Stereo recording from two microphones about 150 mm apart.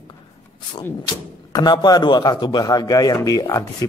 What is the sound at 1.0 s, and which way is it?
A man's voice, 30° left (ahead or behind).